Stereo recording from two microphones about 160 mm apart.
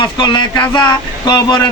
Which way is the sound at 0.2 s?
30° left (ahead or behind).